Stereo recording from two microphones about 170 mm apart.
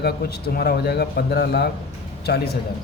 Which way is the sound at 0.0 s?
70° left (ahead or behind).